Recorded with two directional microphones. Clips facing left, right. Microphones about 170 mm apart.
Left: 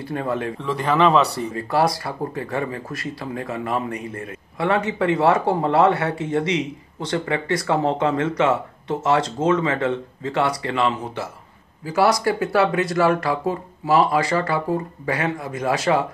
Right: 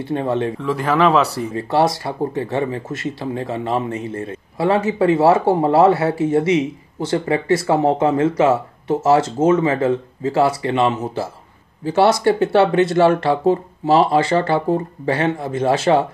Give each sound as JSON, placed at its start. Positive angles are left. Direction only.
{"t": 0.0, "sound": "speech", "side_deg": -25}
{"t": 0.6, "sound": "speech", "side_deg": 0}
{"t": 1.5, "sound": "speech", "side_deg": -25}